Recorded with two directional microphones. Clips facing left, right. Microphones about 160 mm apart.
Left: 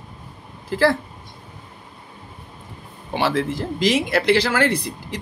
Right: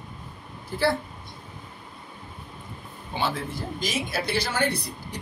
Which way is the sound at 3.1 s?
90° left.